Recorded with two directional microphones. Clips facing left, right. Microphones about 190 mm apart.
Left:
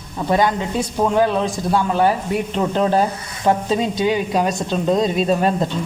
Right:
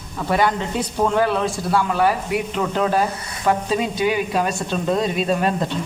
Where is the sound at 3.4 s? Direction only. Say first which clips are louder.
Left 2 dB; 25° left (ahead or behind).